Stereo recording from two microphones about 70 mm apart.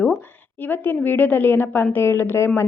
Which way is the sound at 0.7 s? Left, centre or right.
Left.